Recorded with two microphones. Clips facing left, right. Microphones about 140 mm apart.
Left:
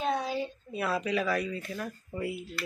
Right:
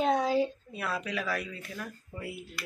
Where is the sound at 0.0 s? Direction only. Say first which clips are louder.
Right 4 dB; 90° right.